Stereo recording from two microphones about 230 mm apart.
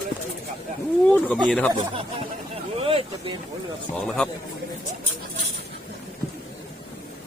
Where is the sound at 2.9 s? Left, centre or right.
Right.